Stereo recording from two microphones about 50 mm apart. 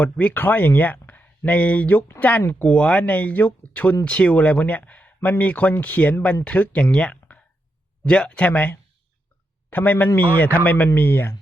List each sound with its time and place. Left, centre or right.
0.0 s speech: left
0.3 s speech: left
2.6 s speech: left
3.0 s speech: left
6.9 s a man's voice: centre; by 10.8 s left
10.9 s speech: left